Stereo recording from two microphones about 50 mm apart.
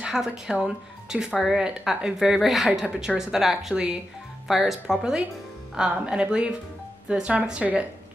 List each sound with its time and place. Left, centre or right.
0.0 s speech: centre